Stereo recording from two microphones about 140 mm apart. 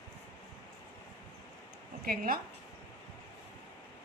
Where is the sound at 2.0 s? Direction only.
90° right.